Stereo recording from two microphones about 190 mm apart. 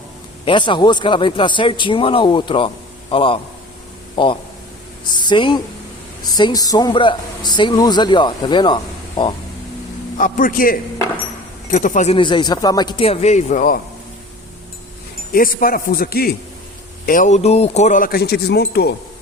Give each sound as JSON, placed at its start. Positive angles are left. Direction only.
{"t": 0.4, "sound": "speech", "side_deg": 25}
{"t": 10.2, "sound": "speech", "side_deg": 45}
{"t": 12.1, "sound": "speech", "side_deg": 25}
{"t": 15.3, "sound": "speech", "side_deg": 50}
{"t": 17.1, "sound": "speech", "side_deg": 40}